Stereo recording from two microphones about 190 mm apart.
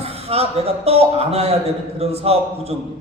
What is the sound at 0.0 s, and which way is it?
A man's voice, 30° right (ahead or behind).